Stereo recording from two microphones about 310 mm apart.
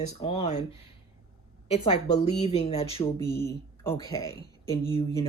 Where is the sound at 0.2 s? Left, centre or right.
Centre.